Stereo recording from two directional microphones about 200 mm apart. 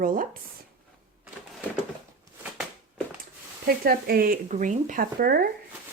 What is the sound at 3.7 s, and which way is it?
Speech, 50° right (ahead or behind).